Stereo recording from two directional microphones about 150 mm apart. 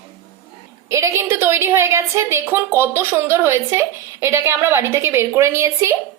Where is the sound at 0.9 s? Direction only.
20° right (ahead or behind).